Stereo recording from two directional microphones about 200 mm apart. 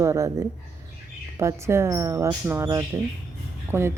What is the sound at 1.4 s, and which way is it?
Speech, 15° right (ahead or behind).